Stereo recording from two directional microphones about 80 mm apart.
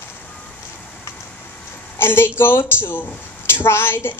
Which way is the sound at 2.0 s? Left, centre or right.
Left.